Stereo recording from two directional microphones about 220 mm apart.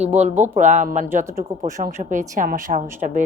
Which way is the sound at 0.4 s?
35° right (ahead or behind).